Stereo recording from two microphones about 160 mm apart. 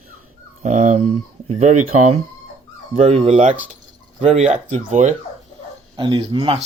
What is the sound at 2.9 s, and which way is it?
Speech, 40° right (ahead or behind).